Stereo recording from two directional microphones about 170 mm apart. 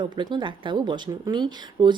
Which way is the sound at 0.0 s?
25° right (ahead or behind).